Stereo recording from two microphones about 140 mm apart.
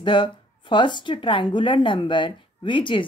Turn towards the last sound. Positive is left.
turn(degrees=35)  # may be behind; listen again after turning